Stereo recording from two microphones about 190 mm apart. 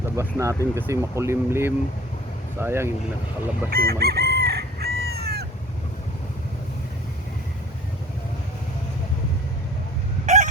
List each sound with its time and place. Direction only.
0.2 s speech: 15° right (ahead or behind)
3.7 s chicken: 55° right (ahead or behind)
10.2 s fowl: 40° right (ahead or behind)